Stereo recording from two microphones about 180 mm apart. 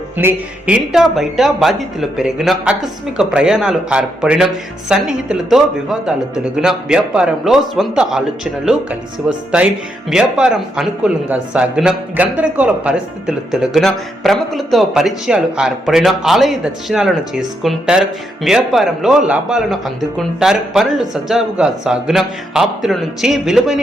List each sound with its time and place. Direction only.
0.2 s a man's voice: 10° right (ahead or behind)
9.2 s a man's voice: 5° right (ahead or behind)